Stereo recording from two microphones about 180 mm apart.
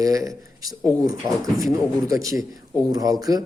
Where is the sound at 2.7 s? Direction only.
20° right (ahead or behind).